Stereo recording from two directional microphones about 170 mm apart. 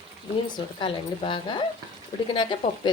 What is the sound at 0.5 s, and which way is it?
Speech, 30° left (ahead or behind).